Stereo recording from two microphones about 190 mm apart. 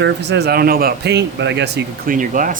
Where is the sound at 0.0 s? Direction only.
65° right (ahead or behind).